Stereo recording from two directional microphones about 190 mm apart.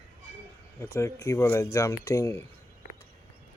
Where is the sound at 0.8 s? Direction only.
15° left (ahead or behind).